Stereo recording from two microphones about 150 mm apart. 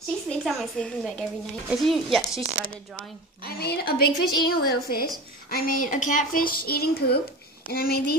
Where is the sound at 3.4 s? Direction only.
90° left.